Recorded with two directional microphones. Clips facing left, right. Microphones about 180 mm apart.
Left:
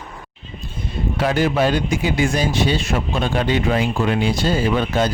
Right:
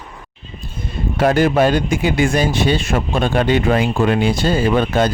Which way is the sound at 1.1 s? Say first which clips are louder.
Right 5 dB; 50° right (ahead or behind).